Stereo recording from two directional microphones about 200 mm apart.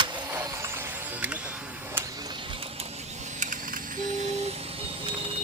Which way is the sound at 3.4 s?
40° right (ahead or behind).